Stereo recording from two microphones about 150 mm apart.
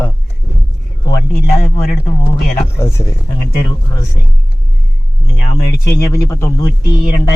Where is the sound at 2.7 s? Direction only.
20° left (ahead or behind).